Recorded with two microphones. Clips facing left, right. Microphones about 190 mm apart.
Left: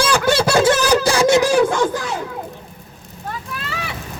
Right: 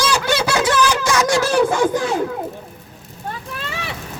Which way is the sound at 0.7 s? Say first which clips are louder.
Left 2 dB; 40° left (ahead or behind).